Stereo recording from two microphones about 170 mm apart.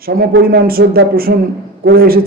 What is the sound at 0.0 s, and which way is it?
Speech, 60° right (ahead or behind).